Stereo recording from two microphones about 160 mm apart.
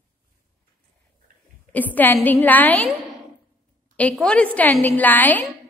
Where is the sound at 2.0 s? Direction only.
10° left (ahead or behind).